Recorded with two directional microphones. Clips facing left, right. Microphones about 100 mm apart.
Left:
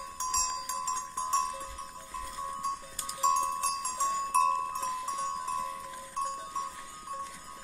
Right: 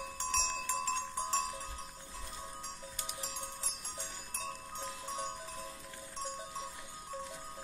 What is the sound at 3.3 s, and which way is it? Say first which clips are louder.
Music: left 16 dB; 85° left.